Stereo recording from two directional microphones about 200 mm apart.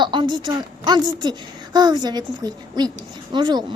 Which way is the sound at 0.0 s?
25° right (ahead or behind).